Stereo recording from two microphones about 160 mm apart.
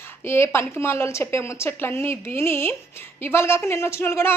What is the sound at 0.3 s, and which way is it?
A woman's voice, 15° left (ahead or behind).